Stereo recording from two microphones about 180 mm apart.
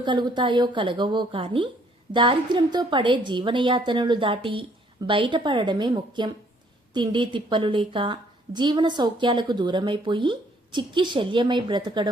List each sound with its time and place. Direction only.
0.0 s a woman's voice: 25° right (ahead or behind)